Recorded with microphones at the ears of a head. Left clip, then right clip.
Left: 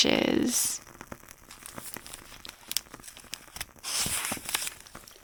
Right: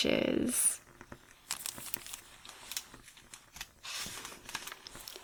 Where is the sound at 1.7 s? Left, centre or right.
Left.